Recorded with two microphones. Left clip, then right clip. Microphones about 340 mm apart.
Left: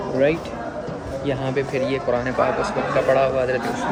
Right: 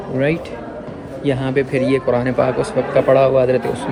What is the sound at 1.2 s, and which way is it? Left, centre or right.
Speech, right.